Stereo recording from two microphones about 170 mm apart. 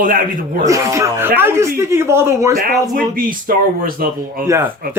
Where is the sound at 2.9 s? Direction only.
55° right (ahead or behind).